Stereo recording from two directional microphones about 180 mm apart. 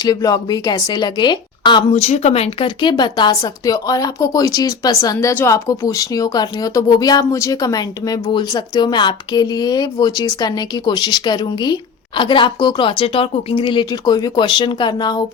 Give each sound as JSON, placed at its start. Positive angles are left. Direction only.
{"t": 0.0, "sound": "a woman's voice", "side_deg": 20}
{"t": 1.9, "sound": "a woman's voice", "side_deg": 40}